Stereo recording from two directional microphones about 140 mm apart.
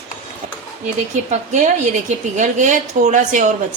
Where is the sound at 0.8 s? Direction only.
55° right (ahead or behind).